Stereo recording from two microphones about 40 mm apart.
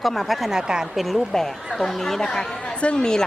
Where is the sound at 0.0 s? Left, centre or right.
Centre.